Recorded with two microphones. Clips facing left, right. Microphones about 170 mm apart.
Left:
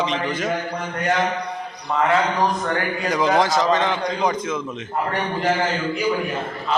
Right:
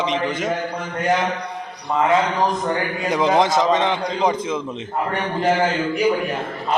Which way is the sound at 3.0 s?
25° right (ahead or behind).